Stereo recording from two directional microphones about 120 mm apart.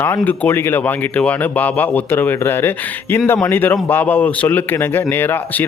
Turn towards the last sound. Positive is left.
turn(degrees=15)  # may be behind; listen again after turning